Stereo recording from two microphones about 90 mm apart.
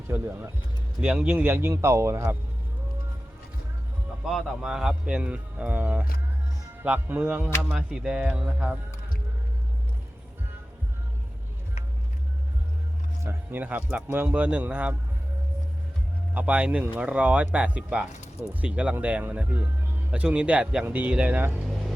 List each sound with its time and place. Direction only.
0.1 s speech: 25° right (ahead or behind)
1.0 s speech: 15° right (ahead or behind); by 2.3 s 30° right (ahead or behind)
4.3 s speech: centre (ahead or behind)
13.2 s speech: 20° right (ahead or behind)
16.3 s speech: 15° right (ahead or behind)